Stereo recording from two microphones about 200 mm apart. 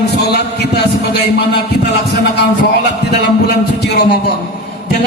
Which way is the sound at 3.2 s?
55° left (ahead or behind).